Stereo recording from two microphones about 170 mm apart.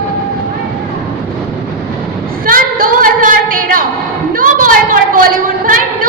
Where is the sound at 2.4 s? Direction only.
55° right (ahead or behind).